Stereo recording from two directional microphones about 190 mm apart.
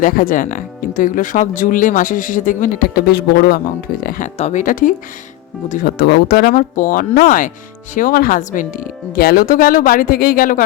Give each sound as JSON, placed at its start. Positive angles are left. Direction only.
{"t": 0.0, "sound": "speech", "side_deg": 45}
{"t": 4.4, "sound": "speech", "side_deg": 40}
{"t": 6.0, "sound": "speech", "side_deg": 55}